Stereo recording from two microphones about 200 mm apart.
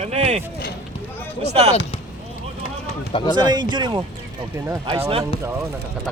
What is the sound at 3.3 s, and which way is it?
Speech, 20° right (ahead or behind).